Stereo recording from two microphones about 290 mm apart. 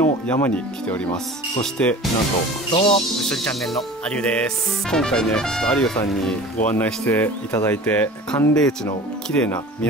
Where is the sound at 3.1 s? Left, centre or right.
Centre.